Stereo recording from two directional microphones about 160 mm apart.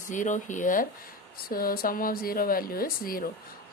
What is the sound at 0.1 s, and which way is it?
Speech, 50° left (ahead or behind).